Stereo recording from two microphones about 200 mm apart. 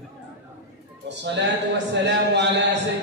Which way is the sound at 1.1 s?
60° right (ahead or behind).